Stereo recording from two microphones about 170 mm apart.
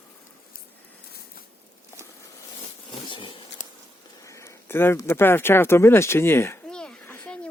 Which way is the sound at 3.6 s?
45° left (ahead or behind).